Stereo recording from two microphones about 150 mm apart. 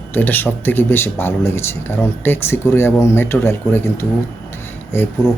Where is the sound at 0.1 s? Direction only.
10° left (ahead or behind).